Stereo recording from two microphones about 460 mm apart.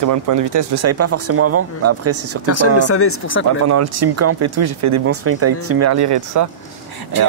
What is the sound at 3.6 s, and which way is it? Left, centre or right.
Speech, right.